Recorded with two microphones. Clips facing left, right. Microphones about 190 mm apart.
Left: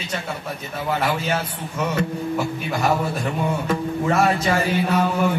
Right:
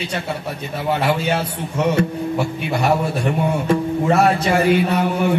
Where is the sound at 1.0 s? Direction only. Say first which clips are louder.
Right 4 dB; 65° right (ahead or behind).